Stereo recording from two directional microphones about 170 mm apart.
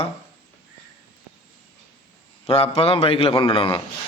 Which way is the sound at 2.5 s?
35° left (ahead or behind).